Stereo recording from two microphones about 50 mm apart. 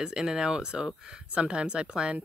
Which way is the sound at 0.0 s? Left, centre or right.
Centre.